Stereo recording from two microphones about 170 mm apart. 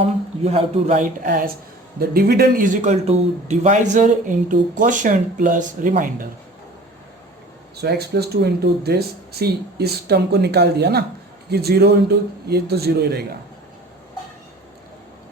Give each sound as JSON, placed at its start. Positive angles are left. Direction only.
{"t": 0.4, "sound": "a man's voice", "side_deg": -40}
{"t": 1.0, "sound": "speech", "side_deg": -55}
{"t": 2.0, "sound": "a man's voice", "side_deg": -65}
{"t": 7.8, "sound": "speech", "side_deg": -70}